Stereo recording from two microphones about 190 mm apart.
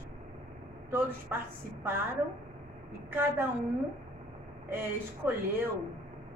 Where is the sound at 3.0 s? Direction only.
10° right (ahead or behind).